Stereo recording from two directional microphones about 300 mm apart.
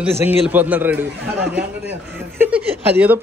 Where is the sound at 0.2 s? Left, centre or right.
Centre.